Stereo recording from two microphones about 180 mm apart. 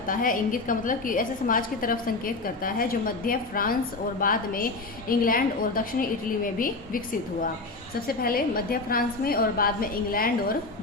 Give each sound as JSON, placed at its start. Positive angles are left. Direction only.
{"t": 0.1, "sound": "a woman's voice", "side_deg": 50}